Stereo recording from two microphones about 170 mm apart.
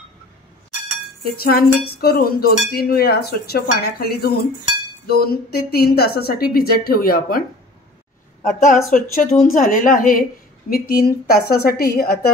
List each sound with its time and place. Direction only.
1.2 s dishes: 60° left (ahead or behind)
8.4 s a woman's voice: 50° left (ahead or behind)
10.7 s dishes: 65° left (ahead or behind)